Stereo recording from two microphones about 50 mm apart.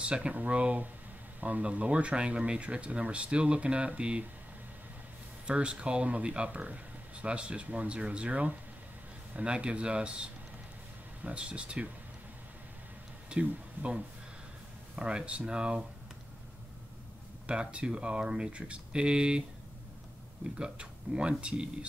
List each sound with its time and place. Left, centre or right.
0.0 s speech: right
5.5 s speech: right
13.3 s speech: right
17.5 s speech: right
20.5 s speech: centre